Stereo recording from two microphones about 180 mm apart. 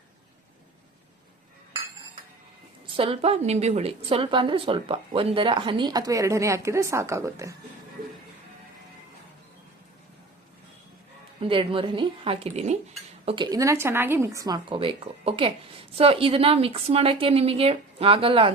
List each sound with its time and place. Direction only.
2.8 s a woman's voice: 30° right (ahead or behind)
11.3 s speech: 30° right (ahead or behind)